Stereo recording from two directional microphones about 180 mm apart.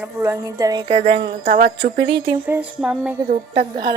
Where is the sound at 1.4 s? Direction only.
55° right (ahead or behind).